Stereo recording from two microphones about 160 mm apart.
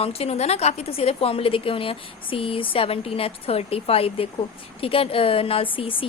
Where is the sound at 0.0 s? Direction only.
40° left (ahead or behind).